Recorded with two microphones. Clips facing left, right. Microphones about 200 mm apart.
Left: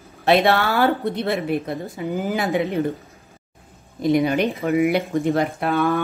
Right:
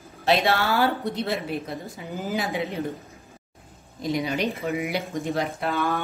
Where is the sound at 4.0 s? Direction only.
55° left (ahead or behind).